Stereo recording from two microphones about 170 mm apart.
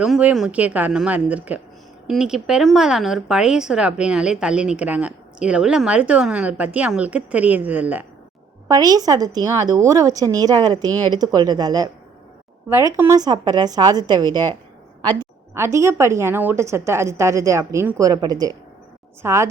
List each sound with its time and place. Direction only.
0.0 s a woman's voice: 5° right (ahead or behind)
8.6 s speech: 20° right (ahead or behind)
15.5 s a woman's voice: 15° right (ahead or behind)